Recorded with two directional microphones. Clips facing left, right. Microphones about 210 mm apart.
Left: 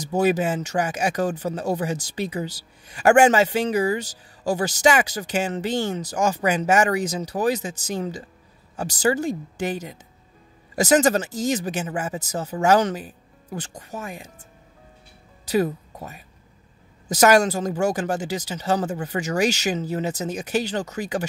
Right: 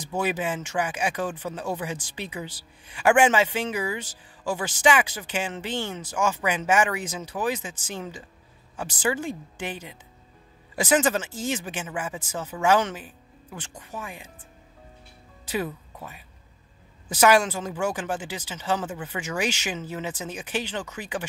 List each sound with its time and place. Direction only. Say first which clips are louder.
0.0 s speech: left 7 dB; 40° left (ahead or behind)
15.4 s speech: left 8 dB; 40° left (ahead or behind)